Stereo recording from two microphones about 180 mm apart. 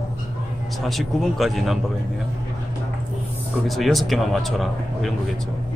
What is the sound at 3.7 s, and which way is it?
Speech, centre (ahead or behind).